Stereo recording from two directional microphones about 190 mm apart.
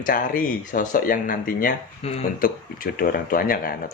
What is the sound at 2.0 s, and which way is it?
Speech, 35° left (ahead or behind).